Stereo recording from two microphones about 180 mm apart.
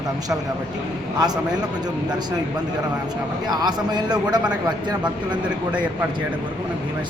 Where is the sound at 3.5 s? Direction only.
25° right (ahead or behind).